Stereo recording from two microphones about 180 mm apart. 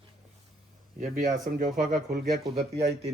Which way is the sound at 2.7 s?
35° right (ahead or behind).